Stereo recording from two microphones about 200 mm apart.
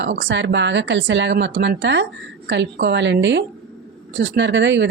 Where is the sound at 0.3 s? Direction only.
65° right (ahead or behind).